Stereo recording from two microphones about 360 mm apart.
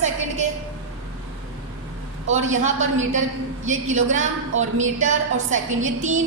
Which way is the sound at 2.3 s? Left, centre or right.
Centre.